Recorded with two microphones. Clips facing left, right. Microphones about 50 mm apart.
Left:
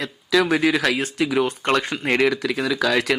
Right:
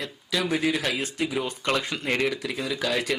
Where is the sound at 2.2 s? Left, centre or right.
Left.